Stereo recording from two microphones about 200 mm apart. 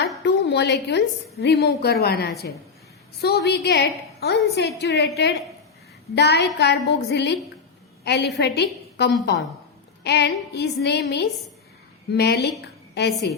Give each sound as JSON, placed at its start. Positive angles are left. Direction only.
{"t": 0.3, "sound": "a woman's voice", "side_deg": 55}